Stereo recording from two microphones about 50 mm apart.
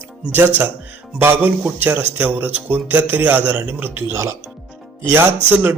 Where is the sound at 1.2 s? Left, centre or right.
Right.